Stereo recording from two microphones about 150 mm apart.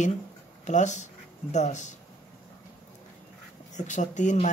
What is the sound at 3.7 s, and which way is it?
Speech, 55° left (ahead or behind).